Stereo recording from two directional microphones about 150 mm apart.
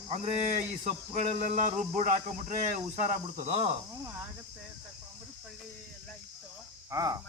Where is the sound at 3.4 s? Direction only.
40° right (ahead or behind).